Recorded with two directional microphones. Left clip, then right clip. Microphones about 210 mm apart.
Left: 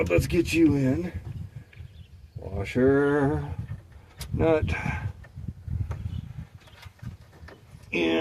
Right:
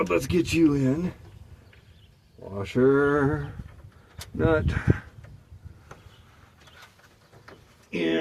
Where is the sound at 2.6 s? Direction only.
20° right (ahead or behind).